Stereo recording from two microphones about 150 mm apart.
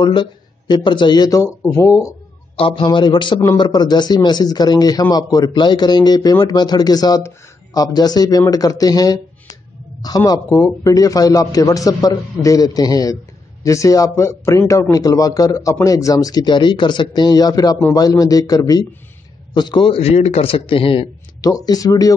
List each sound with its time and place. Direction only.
0.0 s a man's voice: 30° left (ahead or behind)
2.5 s a man's voice: 35° left (ahead or behind)
21.4 s a man's voice: 25° left (ahead or behind)